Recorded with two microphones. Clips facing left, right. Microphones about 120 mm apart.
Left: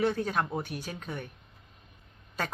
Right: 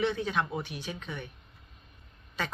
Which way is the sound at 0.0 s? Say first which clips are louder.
Left 1 dB; 45° left (ahead or behind).